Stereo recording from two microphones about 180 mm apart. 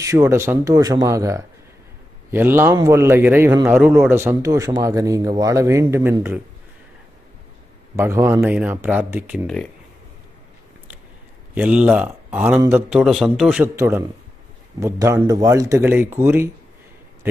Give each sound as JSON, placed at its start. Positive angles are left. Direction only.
{"t": 0.0, "sound": "speech", "side_deg": -15}
{"t": 7.9, "sound": "speech", "side_deg": -15}
{"t": 11.5, "sound": "a man's voice", "side_deg": -5}